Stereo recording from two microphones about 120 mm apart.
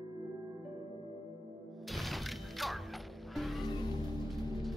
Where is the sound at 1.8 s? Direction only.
Centre (ahead or behind).